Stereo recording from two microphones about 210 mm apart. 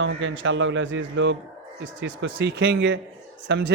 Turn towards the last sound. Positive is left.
turn(degrees=-60)  # may be behind; listen again after turning